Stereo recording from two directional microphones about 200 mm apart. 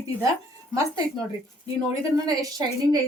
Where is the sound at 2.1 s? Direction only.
20° right (ahead or behind).